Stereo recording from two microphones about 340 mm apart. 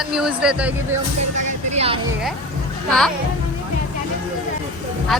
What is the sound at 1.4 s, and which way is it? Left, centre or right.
Speech, centre.